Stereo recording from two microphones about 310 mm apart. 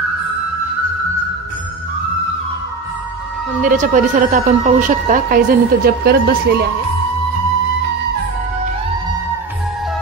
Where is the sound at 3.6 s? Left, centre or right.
Right.